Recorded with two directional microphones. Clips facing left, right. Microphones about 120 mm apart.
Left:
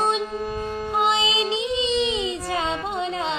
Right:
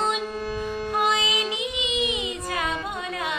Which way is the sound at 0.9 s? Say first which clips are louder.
Left 2 dB; 25° left (ahead or behind).